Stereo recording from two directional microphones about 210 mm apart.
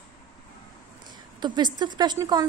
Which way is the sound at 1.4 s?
20° right (ahead or behind).